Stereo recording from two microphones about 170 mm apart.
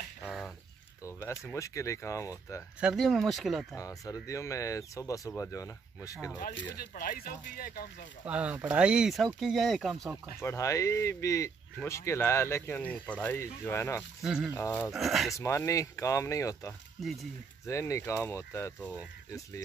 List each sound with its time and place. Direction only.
0.2 s bird: centre (ahead or behind)
1.0 s speech: 15° left (ahead or behind)
2.8 s speech: centre (ahead or behind)
3.7 s speech: 20° left (ahead or behind)
6.8 s speech: 60° left (ahead or behind)
8.3 s speech: 10° right (ahead or behind)
10.4 s speech: 15° left (ahead or behind)
14.2 s speech: 5° right (ahead or behind)
14.5 s speech: 15° left (ahead or behind)
14.9 s speech: centre (ahead or behind)
15.3 s speech: 20° left (ahead or behind)
17.0 s speech: centre (ahead or behind)
17.6 s speech: 15° left (ahead or behind)